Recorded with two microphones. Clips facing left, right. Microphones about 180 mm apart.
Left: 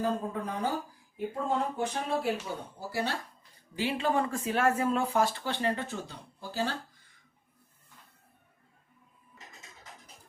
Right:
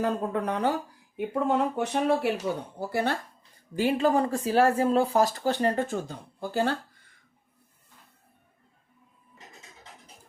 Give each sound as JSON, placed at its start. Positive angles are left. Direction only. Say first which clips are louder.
{"t": 0.0, "sound": "speech", "louder": "right 4 dB", "side_deg": -70}
{"t": 2.7, "sound": "speech", "louder": "right 3 dB", "side_deg": -55}
{"t": 3.8, "sound": "speech", "louder": "right 6 dB", "side_deg": -45}